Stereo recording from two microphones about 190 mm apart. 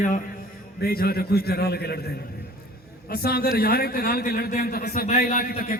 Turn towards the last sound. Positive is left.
turn(degrees=50)  # may be behind; listen again after turning